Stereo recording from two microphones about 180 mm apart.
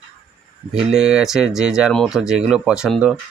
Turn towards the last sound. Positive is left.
turn(degrees=-5)  # may be behind; listen again after turning